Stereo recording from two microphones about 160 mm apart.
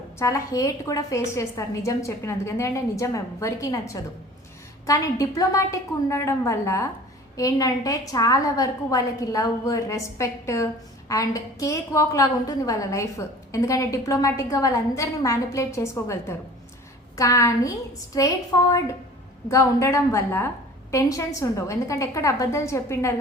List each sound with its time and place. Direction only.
0.2 s a woman's voice: 20° left (ahead or behind)